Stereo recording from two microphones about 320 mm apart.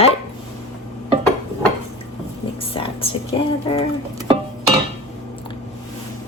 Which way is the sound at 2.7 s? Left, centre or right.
Centre.